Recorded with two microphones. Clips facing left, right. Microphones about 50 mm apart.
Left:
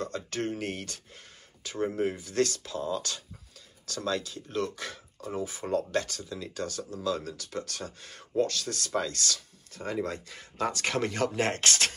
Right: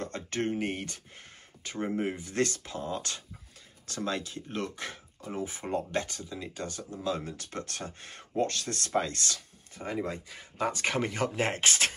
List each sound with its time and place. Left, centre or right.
0.0 s a sound: right
0.5 s speech: right
9.8 s speech: centre